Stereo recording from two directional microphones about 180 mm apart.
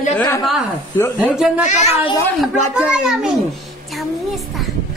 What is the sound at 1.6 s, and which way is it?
Speech, 40° left (ahead or behind).